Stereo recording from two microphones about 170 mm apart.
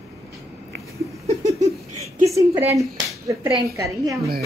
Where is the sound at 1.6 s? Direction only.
20° right (ahead or behind).